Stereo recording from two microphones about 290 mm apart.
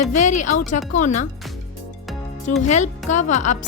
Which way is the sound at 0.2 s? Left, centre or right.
Left.